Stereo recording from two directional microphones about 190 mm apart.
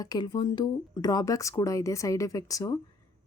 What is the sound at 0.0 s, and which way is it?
A woman's voice, 20° left (ahead or behind).